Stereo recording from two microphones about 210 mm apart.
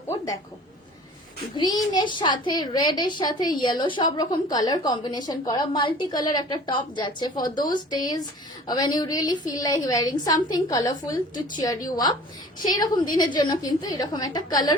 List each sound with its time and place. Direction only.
1.9 s a woman's voice: 20° left (ahead or behind)